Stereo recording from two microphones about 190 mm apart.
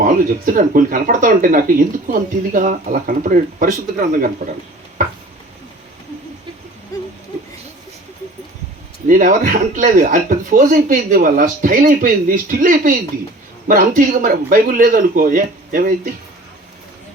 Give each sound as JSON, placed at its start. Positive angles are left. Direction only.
{"t": 0.0, "sound": "speech", "side_deg": -45}
{"t": 6.9, "sound": "a sound", "side_deg": 20}
{"t": 9.0, "sound": "speech", "side_deg": -45}